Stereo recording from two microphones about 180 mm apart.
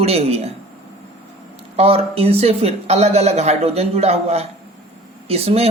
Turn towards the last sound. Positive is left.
turn(degrees=-35)  # may be behind; listen again after turning